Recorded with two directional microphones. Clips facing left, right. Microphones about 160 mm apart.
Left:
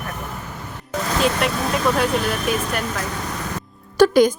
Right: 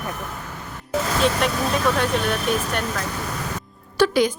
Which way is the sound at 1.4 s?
5° left (ahead or behind).